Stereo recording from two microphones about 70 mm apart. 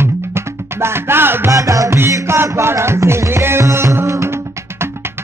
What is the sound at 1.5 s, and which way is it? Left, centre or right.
Music, right.